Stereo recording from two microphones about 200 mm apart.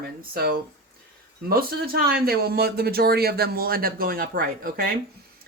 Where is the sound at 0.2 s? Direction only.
50° right (ahead or behind).